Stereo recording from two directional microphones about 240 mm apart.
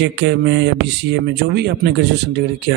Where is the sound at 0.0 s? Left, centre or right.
Right.